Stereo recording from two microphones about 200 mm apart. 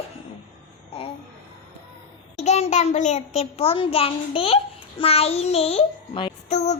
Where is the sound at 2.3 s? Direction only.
35° left (ahead or behind).